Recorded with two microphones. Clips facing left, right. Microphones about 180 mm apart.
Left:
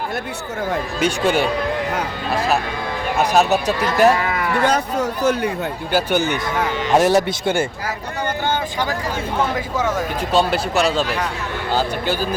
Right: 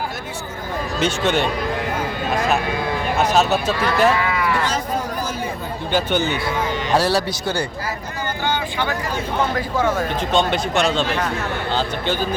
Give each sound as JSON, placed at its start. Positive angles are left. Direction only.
{"t": 0.9, "sound": "speech", "side_deg": 10}
{"t": 3.2, "sound": "speech", "side_deg": 10}
{"t": 4.1, "sound": "speech", "side_deg": 45}
{"t": 5.9, "sound": "speech", "side_deg": 10}
{"t": 8.4, "sound": "vehicle", "side_deg": 40}
{"t": 10.3, "sound": "speech", "side_deg": 5}